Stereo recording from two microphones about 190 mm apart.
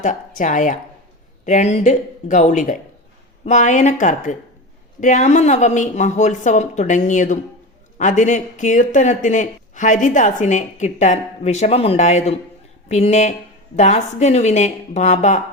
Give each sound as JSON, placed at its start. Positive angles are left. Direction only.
{"t": 0.0, "sound": "speech", "side_deg": 40}